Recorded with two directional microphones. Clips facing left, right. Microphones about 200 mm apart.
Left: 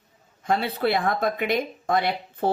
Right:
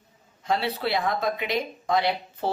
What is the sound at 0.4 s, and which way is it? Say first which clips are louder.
Speech: left 3 dB; 50° left (ahead or behind).